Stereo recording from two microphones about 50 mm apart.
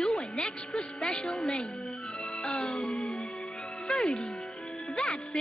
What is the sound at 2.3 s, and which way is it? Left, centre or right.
Music, centre.